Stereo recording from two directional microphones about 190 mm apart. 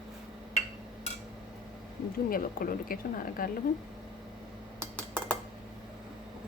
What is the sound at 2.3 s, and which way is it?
Speech, 50° left (ahead or behind).